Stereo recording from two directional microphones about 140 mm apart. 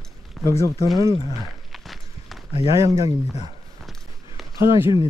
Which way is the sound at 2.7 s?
25° right (ahead or behind).